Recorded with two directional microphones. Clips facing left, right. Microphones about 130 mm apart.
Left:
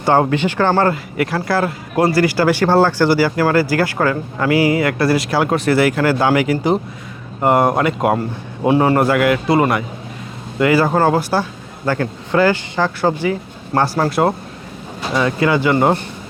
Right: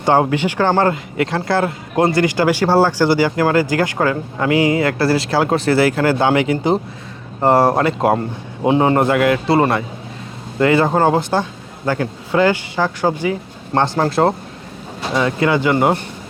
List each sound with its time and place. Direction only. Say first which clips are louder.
0.0 s speech: even; 15° right (ahead or behind)
15.1 s speech: even; 20° right (ahead or behind)